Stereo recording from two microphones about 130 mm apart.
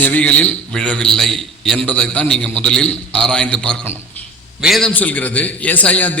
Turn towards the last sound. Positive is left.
turn(degrees=10)  # may be behind; listen again after turning